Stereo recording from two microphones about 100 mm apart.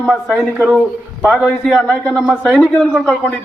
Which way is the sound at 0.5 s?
10° right (ahead or behind).